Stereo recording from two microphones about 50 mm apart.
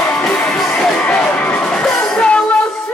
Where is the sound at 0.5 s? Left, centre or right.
Centre.